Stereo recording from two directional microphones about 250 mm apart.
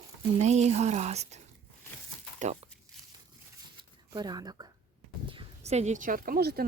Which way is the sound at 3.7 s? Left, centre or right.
Centre.